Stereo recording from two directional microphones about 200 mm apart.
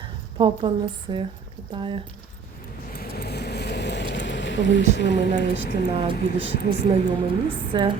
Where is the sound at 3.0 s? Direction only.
55° left (ahead or behind).